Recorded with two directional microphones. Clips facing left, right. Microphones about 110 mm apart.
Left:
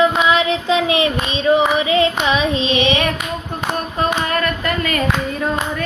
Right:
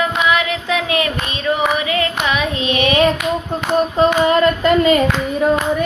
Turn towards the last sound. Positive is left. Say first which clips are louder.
# right 8 dB
turn(degrees=-20)  # may be behind; listen again after turning